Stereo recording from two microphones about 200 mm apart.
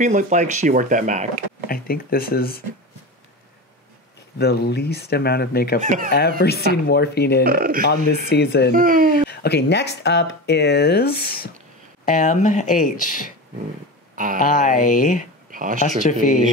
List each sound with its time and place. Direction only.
0.0 s speech: 35° right (ahead or behind)
1.7 s speech: 50° left (ahead or behind)
4.4 s speech: 55° left (ahead or behind)
7.4 s speech: 50° right (ahead or behind)
7.9 s speech: 55° left (ahead or behind)
8.7 s speech: 45° right (ahead or behind)
9.3 s speech: 50° left (ahead or behind)
12.1 s speech: 40° left (ahead or behind)
14.1 s speech: 40° right (ahead or behind)
14.4 s speech: 40° left (ahead or behind)
15.5 s speech: 40° right (ahead or behind)
16.0 s speech: 40° left (ahead or behind)